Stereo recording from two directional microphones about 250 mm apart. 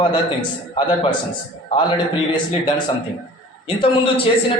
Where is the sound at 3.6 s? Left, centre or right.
Left.